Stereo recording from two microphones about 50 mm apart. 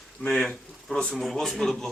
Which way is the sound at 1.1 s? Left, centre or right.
Centre.